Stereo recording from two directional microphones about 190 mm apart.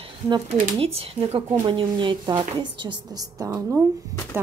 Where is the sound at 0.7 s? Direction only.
30° right (ahead or behind).